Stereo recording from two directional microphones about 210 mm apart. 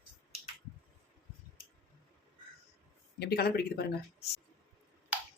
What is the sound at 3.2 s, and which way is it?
Speech, 50° left (ahead or behind).